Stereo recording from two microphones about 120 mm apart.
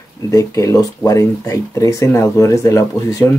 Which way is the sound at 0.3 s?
25° left (ahead or behind).